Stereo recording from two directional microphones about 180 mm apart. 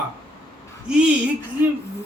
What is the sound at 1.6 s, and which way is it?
Speech, 10° right (ahead or behind).